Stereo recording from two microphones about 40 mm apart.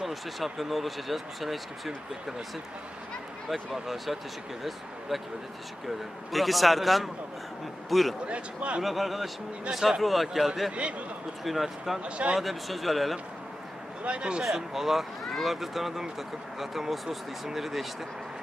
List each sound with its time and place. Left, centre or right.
0.0 s speech: centre
3.5 s speech: centre
6.3 s speech: centre
8.3 s speech: right
8.8 s speech: centre
10.0 s speech: centre
10.7 s speech: right
11.4 s speech: centre
12.0 s speech: right
12.4 s speech: centre
14.0 s speech: right
14.7 s speech: centre